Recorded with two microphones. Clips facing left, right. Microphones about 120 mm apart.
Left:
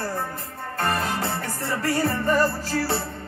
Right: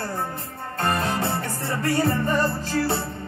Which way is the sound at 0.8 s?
20° right (ahead or behind).